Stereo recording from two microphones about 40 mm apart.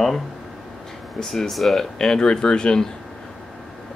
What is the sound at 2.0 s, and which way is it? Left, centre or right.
Speech, centre.